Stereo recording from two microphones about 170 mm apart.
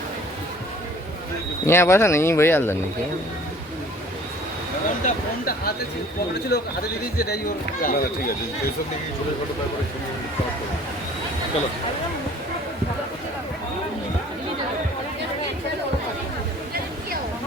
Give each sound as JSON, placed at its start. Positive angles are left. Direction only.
{"t": 1.6, "sound": "speech", "side_deg": 15}
{"t": 5.0, "sound": "speech", "side_deg": 60}
{"t": 6.5, "sound": "a man's voice", "side_deg": 75}
{"t": 7.2, "sound": "speech", "side_deg": 60}